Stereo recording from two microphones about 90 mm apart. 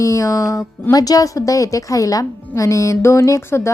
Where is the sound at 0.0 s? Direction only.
40° left (ahead or behind).